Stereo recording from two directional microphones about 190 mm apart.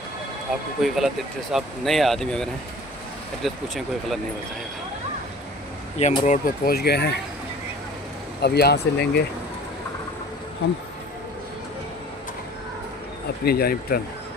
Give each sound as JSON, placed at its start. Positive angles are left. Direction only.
{"t": 0.5, "sound": "speech", "side_deg": 0}
{"t": 5.9, "sound": "speech", "side_deg": 35}
{"t": 8.4, "sound": "speech", "side_deg": 60}
{"t": 13.5, "sound": "speech", "side_deg": 55}